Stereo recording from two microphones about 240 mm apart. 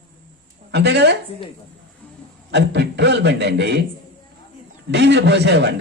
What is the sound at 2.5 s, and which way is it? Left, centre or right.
A man's voice, right.